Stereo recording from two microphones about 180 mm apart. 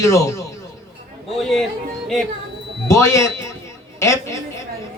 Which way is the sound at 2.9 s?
15° left (ahead or behind).